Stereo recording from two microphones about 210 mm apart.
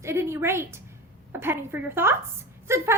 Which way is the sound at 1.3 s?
10° right (ahead or behind).